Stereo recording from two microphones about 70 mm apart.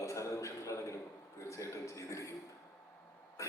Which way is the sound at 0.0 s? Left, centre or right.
Left.